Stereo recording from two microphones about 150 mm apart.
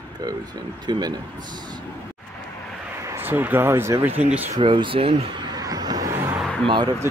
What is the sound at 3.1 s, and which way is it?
Speech, 15° right (ahead or behind).